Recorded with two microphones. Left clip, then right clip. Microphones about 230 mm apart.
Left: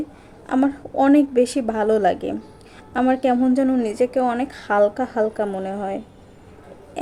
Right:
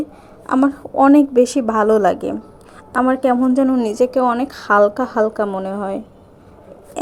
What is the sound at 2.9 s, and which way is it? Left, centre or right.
Speech, centre.